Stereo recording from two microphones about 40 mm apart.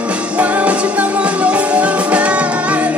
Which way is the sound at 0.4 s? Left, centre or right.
Right.